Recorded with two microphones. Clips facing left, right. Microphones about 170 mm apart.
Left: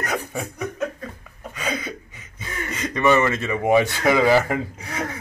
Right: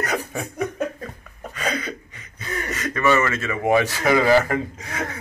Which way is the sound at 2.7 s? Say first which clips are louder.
Left 2 dB; 20° left (ahead or behind).